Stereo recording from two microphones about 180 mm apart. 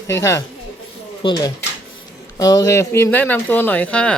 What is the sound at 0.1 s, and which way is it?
Speech, 15° left (ahead or behind).